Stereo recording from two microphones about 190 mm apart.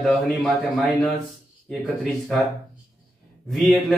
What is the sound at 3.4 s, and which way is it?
Speech, centre (ahead or behind).